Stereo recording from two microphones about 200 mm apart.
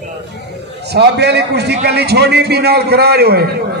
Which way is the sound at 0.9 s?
55° right (ahead or behind).